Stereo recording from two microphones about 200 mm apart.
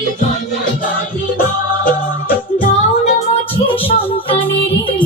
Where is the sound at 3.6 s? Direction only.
25° left (ahead or behind).